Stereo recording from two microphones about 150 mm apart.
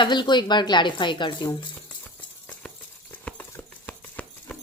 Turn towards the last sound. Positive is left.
turn(degrees=10)  # may be behind; listen again after turning